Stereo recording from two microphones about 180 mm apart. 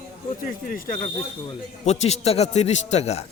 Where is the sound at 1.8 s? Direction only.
40° left (ahead or behind).